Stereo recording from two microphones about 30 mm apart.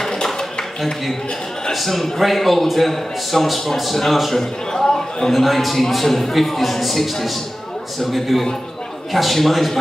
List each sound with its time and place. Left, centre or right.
0.0 s a sound: centre
1.7 s a man's voice: centre
4.7 s a man's voice: centre
5.3 s a man's voice: centre